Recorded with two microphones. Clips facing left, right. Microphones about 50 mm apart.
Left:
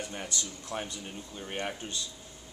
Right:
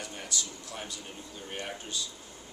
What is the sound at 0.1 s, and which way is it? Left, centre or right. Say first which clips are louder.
Speech: left 1 dB; centre.